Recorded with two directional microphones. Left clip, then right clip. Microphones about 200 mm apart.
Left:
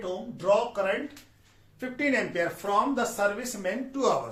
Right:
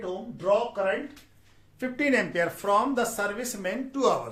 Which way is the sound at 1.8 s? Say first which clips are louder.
Right 2 dB; 55° right (ahead or behind).